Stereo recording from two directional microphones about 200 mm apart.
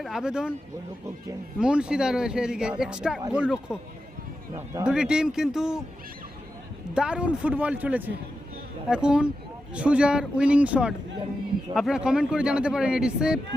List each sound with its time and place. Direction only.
0.0 s speech: centre (ahead or behind)
1.5 s speech: 5° right (ahead or behind)
4.5 s speech: 15° right (ahead or behind)
4.9 s speech: 5° right (ahead or behind)
6.9 s speech: 5° right (ahead or behind)